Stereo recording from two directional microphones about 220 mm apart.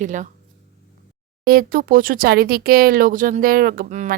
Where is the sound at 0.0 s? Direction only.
35° right (ahead or behind).